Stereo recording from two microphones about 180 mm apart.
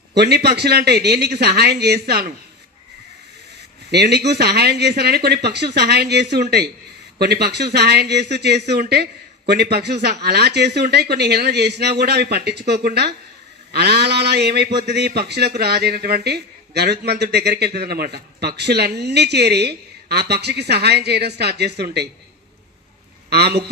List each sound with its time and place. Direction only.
0.1 s a man's voice: 65° right (ahead or behind)
3.9 s a man's voice: 65° right (ahead or behind)
23.3 s a man's voice: 65° right (ahead or behind)